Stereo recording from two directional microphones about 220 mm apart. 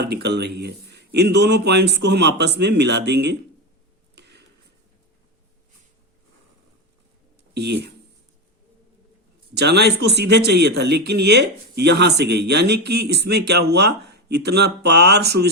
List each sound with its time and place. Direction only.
0.0 s speech: 45° right (ahead or behind)
4.1 s a sound: 50° right (ahead or behind)
7.5 s speech: 50° right (ahead or behind)
9.6 s speech: 50° right (ahead or behind)